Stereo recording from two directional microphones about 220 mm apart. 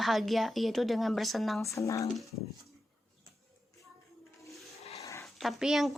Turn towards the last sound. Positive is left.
turn(degrees=0)  # may be behind; listen again after turning